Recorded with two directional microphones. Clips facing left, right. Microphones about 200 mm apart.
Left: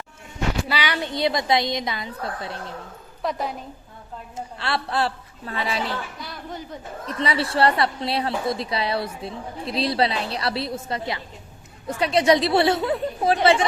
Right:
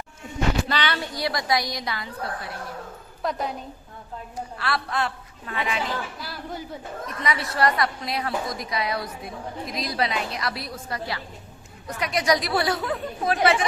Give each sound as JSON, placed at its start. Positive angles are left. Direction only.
{"t": 0.7, "sound": "a sound", "side_deg": 10}
{"t": 1.0, "sound": "a woman's voice", "side_deg": 20}
{"t": 3.2, "sound": "speech", "side_deg": 0}
{"t": 4.4, "sound": "a woman's voice", "side_deg": 25}
{"t": 6.1, "sound": "speech", "side_deg": -5}
{"t": 7.1, "sound": "a woman's voice", "side_deg": 30}